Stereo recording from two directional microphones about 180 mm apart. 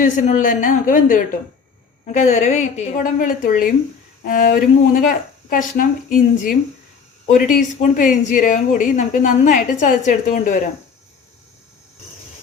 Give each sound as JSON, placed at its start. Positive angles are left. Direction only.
{"t": 0.0, "sound": "speech", "side_deg": 45}